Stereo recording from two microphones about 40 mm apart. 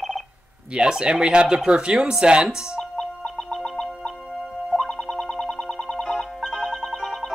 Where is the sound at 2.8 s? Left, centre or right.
Centre.